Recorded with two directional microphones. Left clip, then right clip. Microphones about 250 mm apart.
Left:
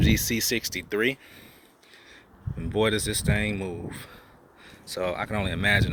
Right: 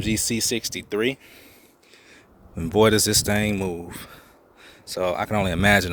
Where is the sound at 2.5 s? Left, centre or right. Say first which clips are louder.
Right 7 dB; right.